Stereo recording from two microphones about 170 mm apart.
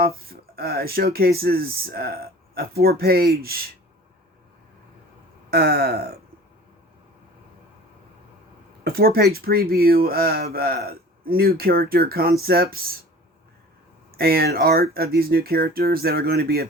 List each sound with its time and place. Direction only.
0.3 s speech: 65° right (ahead or behind)
5.5 s speech: 65° right (ahead or behind)
8.8 s speech: 65° right (ahead or behind)
14.2 s speech: 65° right (ahead or behind)